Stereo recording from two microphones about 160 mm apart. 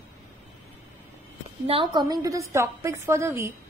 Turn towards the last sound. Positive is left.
turn(degrees=-15)  # may be behind; listen again after turning